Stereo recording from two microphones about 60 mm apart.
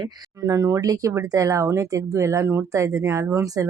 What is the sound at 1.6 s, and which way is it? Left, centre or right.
Speech, right.